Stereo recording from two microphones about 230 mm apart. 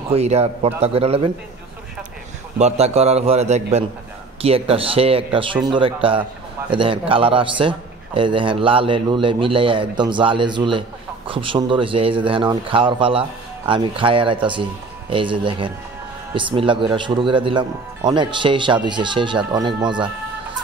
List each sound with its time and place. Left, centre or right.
0.1 s a man's voice: right
2.6 s a man's voice: right